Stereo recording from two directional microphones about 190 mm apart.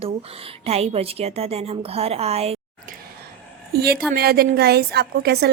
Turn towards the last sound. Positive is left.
turn(degrees=-55)  # may be behind; listen again after turning